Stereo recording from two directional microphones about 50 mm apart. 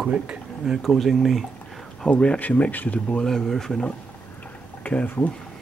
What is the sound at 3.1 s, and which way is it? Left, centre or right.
Speech, centre.